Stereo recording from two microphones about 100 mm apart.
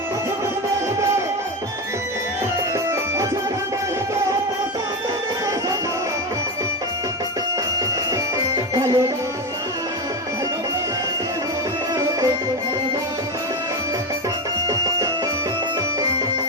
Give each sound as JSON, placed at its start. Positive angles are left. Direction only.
{"t": 2.7, "sound": "music", "side_deg": -30}
{"t": 7.8, "sound": "music", "side_deg": -35}
{"t": 14.7, "sound": "music", "side_deg": -35}